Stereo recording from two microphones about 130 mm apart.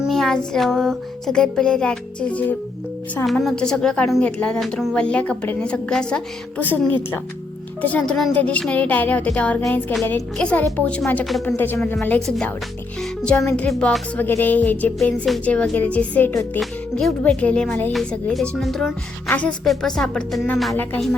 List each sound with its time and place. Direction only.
0.0 s music: centre (ahead or behind)
3.2 s a woman's voice: 5° left (ahead or behind)
4.9 s music: 10° left (ahead or behind)
7.8 s music: 10° left (ahead or behind)
10.0 s a woman's voice: 20° left (ahead or behind)
10.3 s music: 10° left (ahead or behind)
17.9 s a woman's voice: 5° left (ahead or behind)